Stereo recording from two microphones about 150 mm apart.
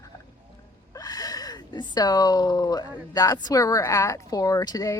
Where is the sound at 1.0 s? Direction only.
25° left (ahead or behind).